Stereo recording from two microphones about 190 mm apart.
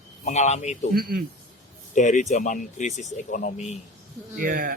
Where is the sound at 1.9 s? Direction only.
40° left (ahead or behind).